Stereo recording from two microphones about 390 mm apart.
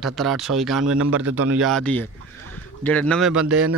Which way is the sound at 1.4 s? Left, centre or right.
Centre.